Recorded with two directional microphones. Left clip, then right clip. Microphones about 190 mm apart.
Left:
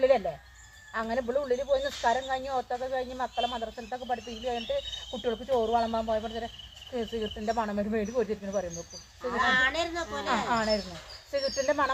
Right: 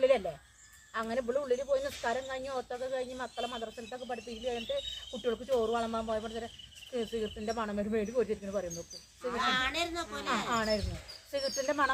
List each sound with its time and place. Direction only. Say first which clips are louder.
0.9 s speech: left 3 dB; 5° right (ahead or behind)
9.3 s a woman's voice: left 6 dB; 45° right (ahead or behind)
10.2 s speech: left 4 dB; 10° right (ahead or behind)